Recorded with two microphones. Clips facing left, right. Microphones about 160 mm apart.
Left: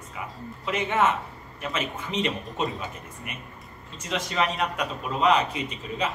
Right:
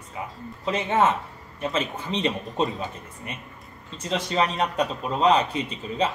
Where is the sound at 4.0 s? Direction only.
30° right (ahead or behind).